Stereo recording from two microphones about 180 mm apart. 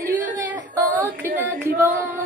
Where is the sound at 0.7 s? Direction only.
15° right (ahead or behind).